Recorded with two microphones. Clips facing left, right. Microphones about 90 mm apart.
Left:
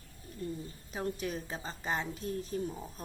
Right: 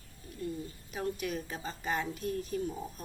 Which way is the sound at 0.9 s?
30° left (ahead or behind).